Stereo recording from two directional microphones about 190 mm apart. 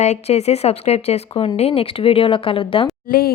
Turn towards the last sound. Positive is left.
turn(degrees=50)  # may be behind; listen again after turning